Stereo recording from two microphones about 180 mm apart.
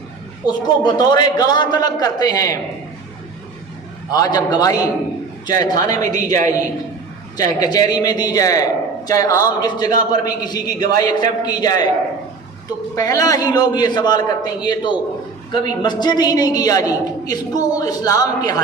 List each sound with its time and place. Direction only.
0.4 s a man's voice: 25° left (ahead or behind)
4.1 s a man's voice: 20° left (ahead or behind)
7.3 s a man's voice: 20° left (ahead or behind)
13.0 s a man's voice: 20° left (ahead or behind)